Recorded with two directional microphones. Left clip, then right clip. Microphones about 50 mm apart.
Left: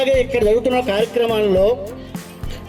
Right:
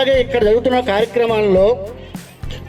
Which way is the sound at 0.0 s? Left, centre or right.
Right.